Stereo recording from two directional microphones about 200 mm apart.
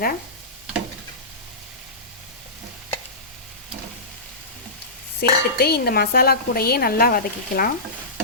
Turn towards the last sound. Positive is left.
turn(degrees=50)  # may be behind; listen again after turning